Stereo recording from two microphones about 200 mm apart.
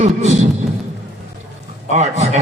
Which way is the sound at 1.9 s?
35° right (ahead or behind).